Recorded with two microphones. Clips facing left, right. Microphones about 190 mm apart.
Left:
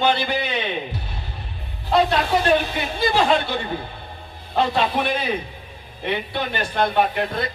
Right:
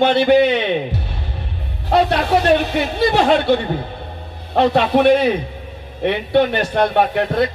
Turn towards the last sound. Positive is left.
turn(degrees=-70)  # may be behind; listen again after turning